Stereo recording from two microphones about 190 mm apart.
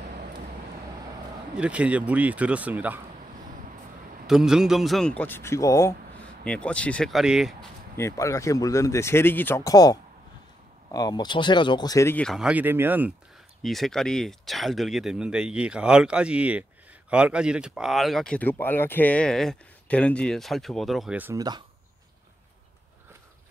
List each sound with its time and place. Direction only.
1.5 s a man's voice: 5° right (ahead or behind)
4.3 s speech: 5° right (ahead or behind); by 5.9 s 15° left (ahead or behind)
6.4 s speech: 5° left (ahead or behind)
8.0 s speech: 15° left (ahead or behind); by 13.1 s 10° right (ahead or behind)
13.6 s speech: centre (ahead or behind)
21.4 s speech: 20° right (ahead or behind)